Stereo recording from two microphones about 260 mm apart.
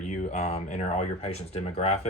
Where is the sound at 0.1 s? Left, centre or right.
Left.